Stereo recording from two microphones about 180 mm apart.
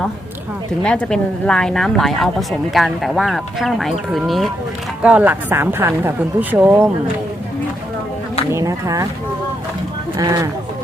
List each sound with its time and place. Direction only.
0.8 s a woman's voice: 5° left (ahead or behind); by 6.9 s 10° right (ahead or behind)
8.5 s speech: 20° right (ahead or behind)
10.2 s speech: 20° right (ahead or behind)